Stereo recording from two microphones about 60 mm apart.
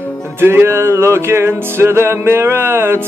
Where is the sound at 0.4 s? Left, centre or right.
Right.